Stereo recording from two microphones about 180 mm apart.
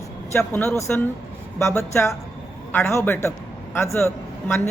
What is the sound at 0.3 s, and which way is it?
Speech, 5° left (ahead or behind).